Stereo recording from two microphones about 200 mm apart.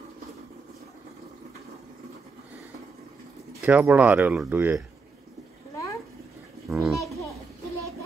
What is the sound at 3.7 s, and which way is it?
A child's voice, 10° right (ahead or behind).